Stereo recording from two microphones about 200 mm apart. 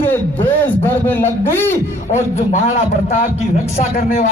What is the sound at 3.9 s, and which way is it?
Speech, 40° left (ahead or behind).